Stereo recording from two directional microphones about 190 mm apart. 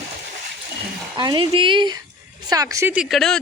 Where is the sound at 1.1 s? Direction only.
25° right (ahead or behind).